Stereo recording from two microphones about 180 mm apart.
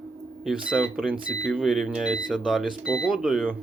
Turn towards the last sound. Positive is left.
turn(degrees=-5)  # may be behind; listen again after turning